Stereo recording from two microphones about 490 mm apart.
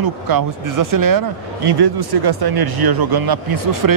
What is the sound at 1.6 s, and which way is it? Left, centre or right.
Speech, right.